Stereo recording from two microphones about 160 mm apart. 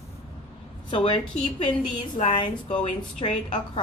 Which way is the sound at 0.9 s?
30° left (ahead or behind).